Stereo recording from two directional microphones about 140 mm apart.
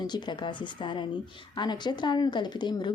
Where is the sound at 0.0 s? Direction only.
30° left (ahead or behind).